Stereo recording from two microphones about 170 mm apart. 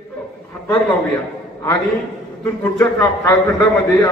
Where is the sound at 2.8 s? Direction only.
20° left (ahead or behind).